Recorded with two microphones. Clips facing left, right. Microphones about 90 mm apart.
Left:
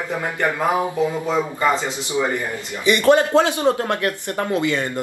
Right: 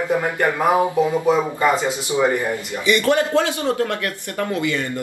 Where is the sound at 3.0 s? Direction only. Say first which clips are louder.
Left 7 dB; 20° left (ahead or behind).